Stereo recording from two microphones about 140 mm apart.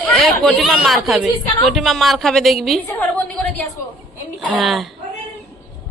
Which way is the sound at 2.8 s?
10° left (ahead or behind).